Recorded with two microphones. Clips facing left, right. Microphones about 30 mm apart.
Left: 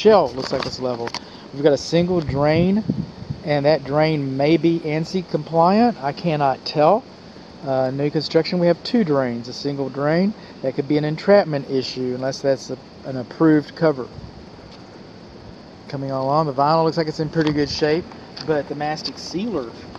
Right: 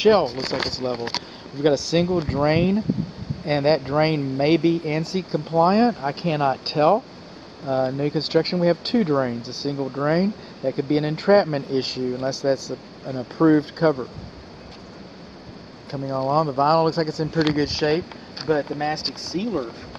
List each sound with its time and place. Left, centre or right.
0.7 s speech: centre
1.6 s speech: centre
15.9 s speech: centre